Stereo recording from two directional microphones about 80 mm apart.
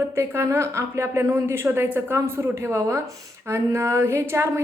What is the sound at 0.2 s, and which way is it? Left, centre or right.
A woman's voice, right.